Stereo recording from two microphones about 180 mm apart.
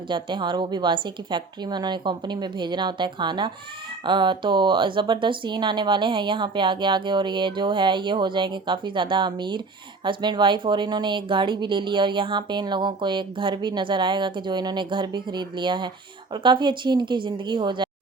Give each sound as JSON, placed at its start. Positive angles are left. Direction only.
{"t": 0.1, "sound": "a woman's voice", "side_deg": -25}